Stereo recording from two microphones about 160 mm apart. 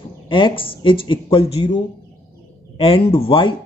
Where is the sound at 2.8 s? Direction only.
35° left (ahead or behind).